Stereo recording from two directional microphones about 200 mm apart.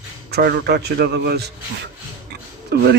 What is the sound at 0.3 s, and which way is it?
Speech, 55° right (ahead or behind).